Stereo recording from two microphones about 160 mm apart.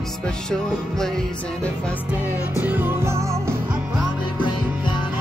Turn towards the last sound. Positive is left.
turn(degrees=-15)  # may be behind; listen again after turning